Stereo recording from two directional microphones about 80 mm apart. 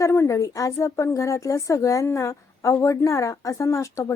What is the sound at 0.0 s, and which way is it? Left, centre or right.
Speech, left.